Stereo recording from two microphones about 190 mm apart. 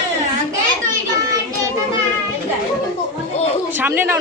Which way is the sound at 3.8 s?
10° right (ahead or behind).